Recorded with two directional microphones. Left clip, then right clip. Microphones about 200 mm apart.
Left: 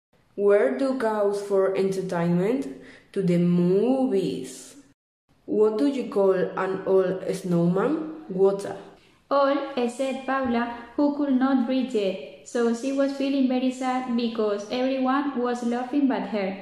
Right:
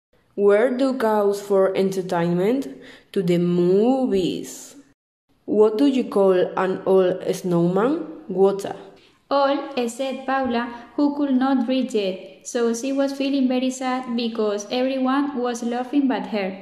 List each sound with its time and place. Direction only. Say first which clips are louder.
0.4 s speech: right 3 dB; 35° right (ahead or behind)
5.6 s speech: right 5 dB; 35° right (ahead or behind)